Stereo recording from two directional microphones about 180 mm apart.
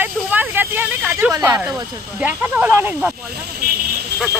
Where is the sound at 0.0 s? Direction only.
10° right (ahead or behind).